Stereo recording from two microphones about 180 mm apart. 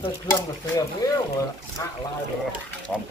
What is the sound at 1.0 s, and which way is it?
Speech, 20° left (ahead or behind).